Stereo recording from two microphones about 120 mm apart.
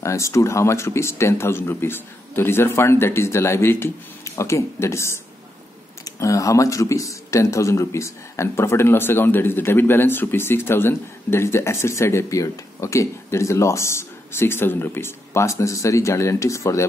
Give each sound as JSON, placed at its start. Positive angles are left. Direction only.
{"t": 0.0, "sound": "speech", "side_deg": 25}